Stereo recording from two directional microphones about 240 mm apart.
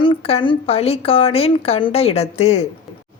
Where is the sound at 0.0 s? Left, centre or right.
Left.